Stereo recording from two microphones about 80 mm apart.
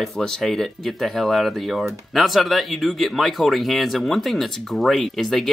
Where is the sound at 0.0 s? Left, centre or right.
Centre.